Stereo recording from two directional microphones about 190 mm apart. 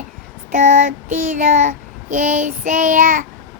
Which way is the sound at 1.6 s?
40° right (ahead or behind).